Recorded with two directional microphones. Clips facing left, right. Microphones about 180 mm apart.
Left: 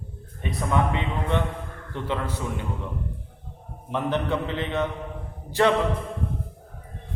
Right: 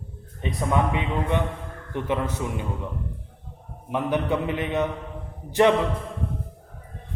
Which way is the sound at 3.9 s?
15° right (ahead or behind).